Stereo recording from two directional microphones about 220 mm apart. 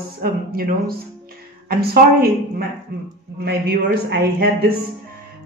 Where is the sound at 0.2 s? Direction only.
45° right (ahead or behind).